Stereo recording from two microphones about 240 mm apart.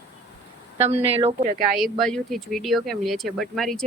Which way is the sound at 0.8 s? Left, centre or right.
Right.